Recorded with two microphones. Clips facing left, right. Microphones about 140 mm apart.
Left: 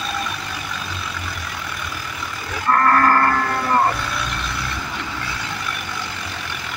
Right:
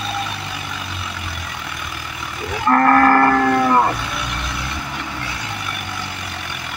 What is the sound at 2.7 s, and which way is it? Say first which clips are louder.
Livestock: right 3 dB; 90° right.